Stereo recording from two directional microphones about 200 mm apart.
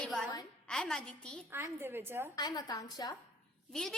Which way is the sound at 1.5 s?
10° right (ahead or behind).